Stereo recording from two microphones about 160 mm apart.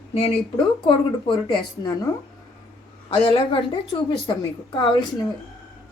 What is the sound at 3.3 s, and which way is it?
Speech, 30° left (ahead or behind).